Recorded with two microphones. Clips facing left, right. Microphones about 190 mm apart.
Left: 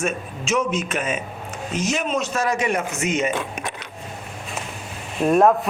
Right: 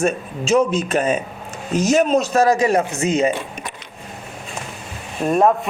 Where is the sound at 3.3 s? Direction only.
55° left (ahead or behind).